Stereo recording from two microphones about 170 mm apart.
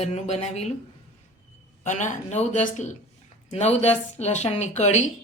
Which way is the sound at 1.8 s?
45° left (ahead or behind).